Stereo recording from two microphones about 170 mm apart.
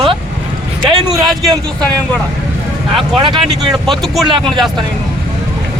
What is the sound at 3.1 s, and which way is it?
Speech, 30° right (ahead or behind).